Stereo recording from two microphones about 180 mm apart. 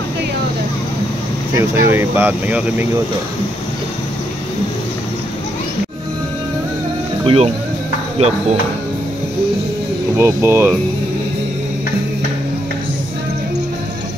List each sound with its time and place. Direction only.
1.5 s speech: 15° right (ahead or behind)
7.2 s speech: 35° right (ahead or behind)
10.1 s speech: 15° right (ahead or behind)